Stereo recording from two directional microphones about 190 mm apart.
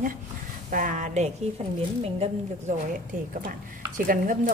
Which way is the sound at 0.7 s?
45° right (ahead or behind).